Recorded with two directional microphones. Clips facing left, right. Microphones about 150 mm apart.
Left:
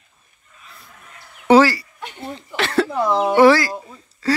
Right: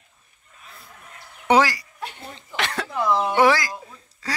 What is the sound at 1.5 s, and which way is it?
Fowl, 15° right (ahead or behind).